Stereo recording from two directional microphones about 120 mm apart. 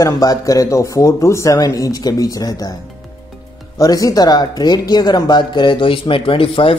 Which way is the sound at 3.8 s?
30° left (ahead or behind).